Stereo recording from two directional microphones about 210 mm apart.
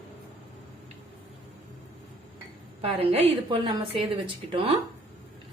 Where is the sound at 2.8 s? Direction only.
30° right (ahead or behind).